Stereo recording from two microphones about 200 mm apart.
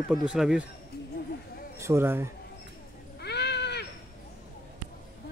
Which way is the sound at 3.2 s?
55° left (ahead or behind).